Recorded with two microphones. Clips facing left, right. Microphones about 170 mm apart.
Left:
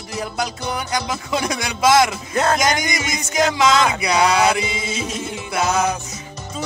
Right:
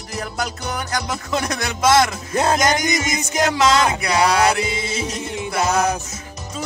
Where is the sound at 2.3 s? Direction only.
20° right (ahead or behind).